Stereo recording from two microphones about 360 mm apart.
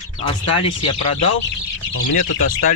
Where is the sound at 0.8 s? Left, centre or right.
Left.